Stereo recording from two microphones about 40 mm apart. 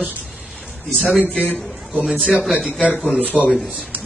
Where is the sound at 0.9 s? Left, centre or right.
Centre.